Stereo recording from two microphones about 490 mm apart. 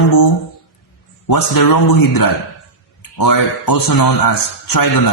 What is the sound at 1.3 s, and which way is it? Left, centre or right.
A man's voice, left.